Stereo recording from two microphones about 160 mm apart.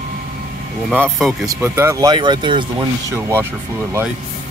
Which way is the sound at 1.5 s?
15° right (ahead or behind).